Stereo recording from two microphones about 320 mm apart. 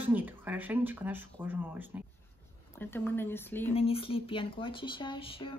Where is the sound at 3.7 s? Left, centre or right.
Centre.